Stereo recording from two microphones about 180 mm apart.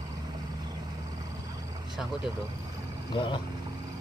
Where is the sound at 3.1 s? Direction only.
30° left (ahead or behind).